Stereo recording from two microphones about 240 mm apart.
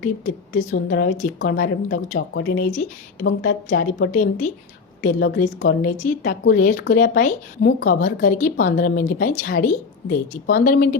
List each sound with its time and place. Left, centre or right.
0.0 s speech: left